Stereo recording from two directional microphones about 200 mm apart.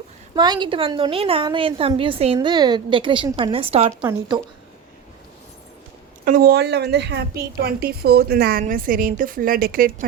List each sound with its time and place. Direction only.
0.3 s a woman's voice: 20° right (ahead or behind)
6.2 s a woman's voice: 45° right (ahead or behind)